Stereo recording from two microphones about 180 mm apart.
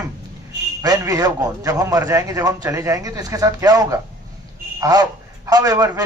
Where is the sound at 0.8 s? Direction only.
20° right (ahead or behind).